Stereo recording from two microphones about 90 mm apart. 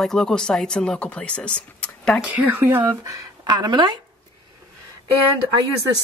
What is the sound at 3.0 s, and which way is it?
Speech, 45° right (ahead or behind).